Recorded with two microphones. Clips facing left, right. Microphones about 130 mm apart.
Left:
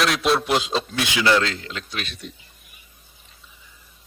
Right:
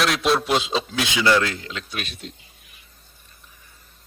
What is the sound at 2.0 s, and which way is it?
Speech, 45° right (ahead or behind).